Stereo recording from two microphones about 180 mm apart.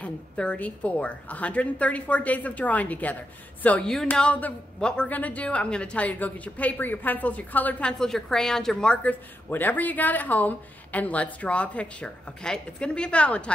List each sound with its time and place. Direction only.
0.0 s a woman's voice: 5° left (ahead or behind)